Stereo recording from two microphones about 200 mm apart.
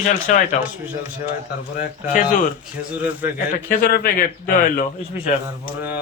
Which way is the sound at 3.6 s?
45° left (ahead or behind).